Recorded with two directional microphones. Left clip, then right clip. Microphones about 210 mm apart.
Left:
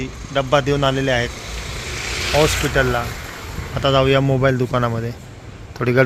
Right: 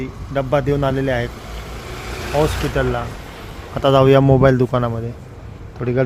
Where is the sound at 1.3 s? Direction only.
50° right (ahead or behind).